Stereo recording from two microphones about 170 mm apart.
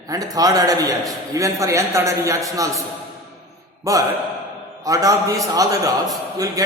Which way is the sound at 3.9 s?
20° right (ahead or behind).